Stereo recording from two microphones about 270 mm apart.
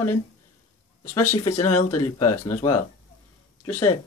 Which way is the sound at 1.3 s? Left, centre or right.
Left.